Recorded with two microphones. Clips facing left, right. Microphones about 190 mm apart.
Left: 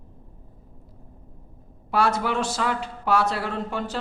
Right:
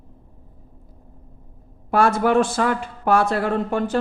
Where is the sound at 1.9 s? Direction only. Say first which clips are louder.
Right 6 dB; 50° right (ahead or behind).